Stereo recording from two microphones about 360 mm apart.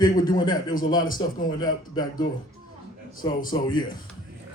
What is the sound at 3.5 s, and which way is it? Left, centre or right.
Speech, centre.